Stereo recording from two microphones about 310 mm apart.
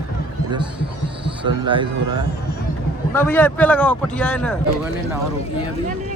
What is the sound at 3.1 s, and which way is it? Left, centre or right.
Speech, centre.